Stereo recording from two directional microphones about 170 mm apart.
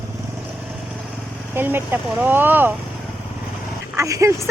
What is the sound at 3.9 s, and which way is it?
Speech, 15° right (ahead or behind).